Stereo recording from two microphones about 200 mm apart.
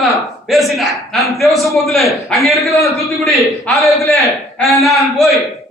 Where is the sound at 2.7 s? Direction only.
15° left (ahead or behind).